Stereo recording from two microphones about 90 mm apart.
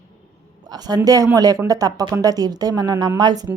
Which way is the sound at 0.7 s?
50° right (ahead or behind).